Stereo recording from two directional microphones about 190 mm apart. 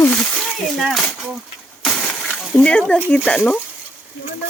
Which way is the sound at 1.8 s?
5° left (ahead or behind).